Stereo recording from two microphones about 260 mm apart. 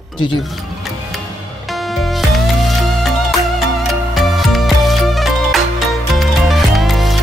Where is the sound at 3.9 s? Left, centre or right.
Centre.